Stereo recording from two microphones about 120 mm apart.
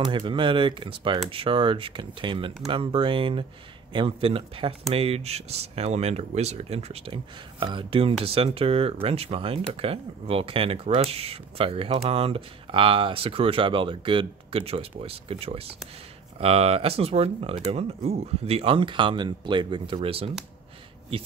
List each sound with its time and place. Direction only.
0.0 s speech: 40° right (ahead or behind)
20.0 s speech: 50° right (ahead or behind)